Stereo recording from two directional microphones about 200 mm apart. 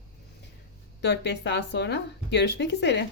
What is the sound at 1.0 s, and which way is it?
A woman's voice, 55° left (ahead or behind).